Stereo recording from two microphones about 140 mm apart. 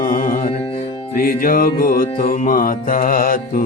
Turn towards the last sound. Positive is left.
turn(degrees=85)